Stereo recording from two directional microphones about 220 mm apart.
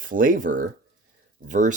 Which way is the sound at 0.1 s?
40° right (ahead or behind).